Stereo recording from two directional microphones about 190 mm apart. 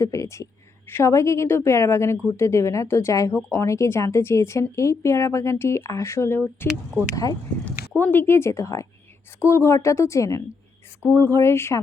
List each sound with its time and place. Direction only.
0.0 s speech: 15° left (ahead or behind)